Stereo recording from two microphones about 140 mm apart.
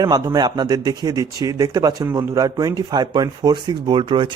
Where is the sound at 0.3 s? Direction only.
30° right (ahead or behind).